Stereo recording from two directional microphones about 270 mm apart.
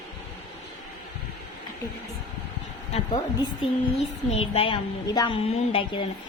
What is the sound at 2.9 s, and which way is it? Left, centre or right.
Speech, left.